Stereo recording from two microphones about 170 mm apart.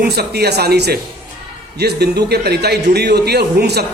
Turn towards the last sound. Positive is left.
turn(degrees=-75)  # may be behind; listen again after turning